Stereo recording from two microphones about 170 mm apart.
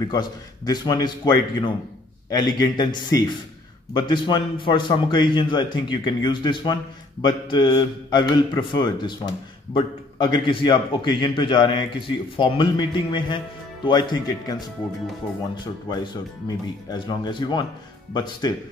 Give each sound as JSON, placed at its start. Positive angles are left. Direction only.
{"t": 0.1, "sound": "a man's voice", "side_deg": 25}